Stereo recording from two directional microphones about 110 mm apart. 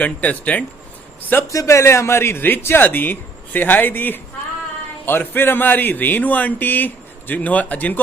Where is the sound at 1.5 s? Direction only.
30° left (ahead or behind).